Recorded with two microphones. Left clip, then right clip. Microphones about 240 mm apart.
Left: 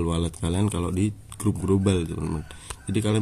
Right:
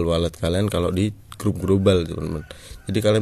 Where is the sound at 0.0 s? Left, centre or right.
Centre.